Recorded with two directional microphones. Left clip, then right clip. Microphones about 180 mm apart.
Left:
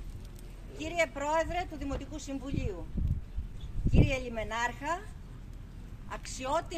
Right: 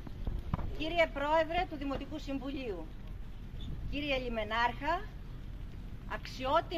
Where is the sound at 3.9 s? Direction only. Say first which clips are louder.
Left 2 dB; 20° left (ahead or behind).